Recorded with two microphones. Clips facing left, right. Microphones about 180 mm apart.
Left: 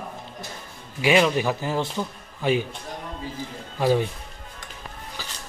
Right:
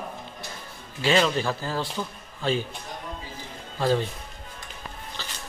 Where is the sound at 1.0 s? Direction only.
15° left (ahead or behind).